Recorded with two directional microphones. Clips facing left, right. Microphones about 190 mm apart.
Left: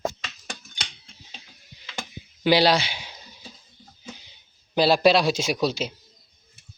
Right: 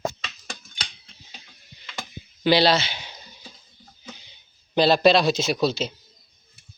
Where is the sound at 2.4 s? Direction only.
10° left (ahead or behind).